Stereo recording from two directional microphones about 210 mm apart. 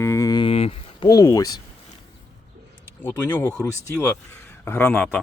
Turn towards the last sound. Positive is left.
turn(degrees=5)  # may be behind; listen again after turning